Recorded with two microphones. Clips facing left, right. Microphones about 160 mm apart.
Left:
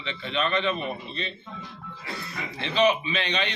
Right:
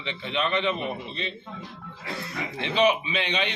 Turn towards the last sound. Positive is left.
turn(degrees=-15)  # may be behind; listen again after turning